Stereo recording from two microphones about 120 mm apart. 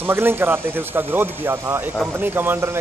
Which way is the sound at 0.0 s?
20° right (ahead or behind).